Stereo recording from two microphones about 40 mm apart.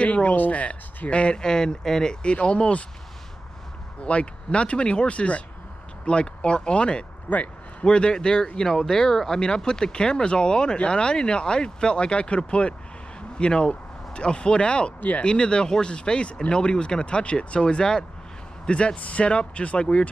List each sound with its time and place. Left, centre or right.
0.0 s speech: left
4.0 s speech: left
7.3 s speech: left
7.8 s speech: left
15.0 s speech: left
15.2 s speech: left